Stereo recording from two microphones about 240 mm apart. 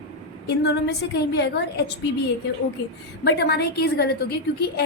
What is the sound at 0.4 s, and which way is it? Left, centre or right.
A woman's voice, left.